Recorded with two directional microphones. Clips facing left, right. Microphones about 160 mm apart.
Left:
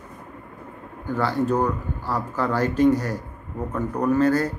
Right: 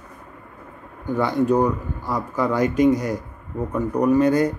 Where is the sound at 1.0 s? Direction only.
15° right (ahead or behind).